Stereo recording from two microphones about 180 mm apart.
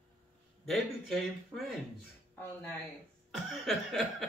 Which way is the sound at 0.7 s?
Centre (ahead or behind).